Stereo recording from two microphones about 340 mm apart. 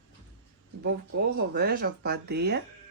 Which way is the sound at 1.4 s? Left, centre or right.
Right.